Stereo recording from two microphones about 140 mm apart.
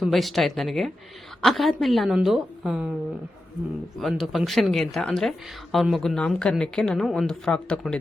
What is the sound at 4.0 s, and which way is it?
Speech, centre (ahead or behind).